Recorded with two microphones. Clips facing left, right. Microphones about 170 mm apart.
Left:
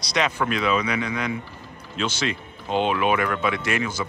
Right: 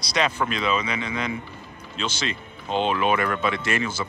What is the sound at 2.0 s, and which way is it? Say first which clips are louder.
Speech: left 3 dB; 10° left (ahead or behind).